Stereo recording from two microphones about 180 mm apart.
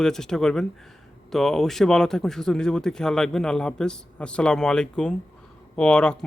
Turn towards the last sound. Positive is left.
turn(degrees=5)  # may be behind; listen again after turning